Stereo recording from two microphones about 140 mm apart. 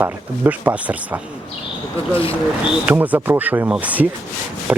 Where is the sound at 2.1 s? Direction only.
40° left (ahead or behind).